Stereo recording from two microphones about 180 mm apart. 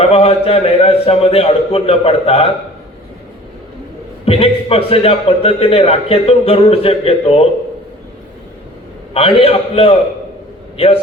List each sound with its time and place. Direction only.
0.0 s a man's voice: 35° left (ahead or behind)
4.3 s a man's voice: 35° left (ahead or behind)
9.1 s a man's voice: 35° left (ahead or behind)